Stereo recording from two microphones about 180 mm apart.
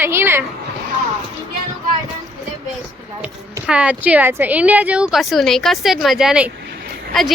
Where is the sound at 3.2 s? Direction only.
5° right (ahead or behind).